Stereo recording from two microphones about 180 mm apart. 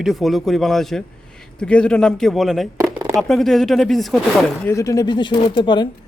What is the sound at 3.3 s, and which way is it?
Speech, centre (ahead or behind).